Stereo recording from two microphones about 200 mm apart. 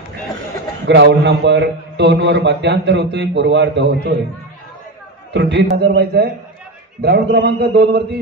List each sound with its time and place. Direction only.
0.8 s a man's voice: 60° right (ahead or behind)
5.3 s a man's voice: 60° right (ahead or behind)